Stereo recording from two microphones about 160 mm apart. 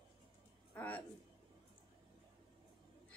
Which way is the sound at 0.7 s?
10° left (ahead or behind).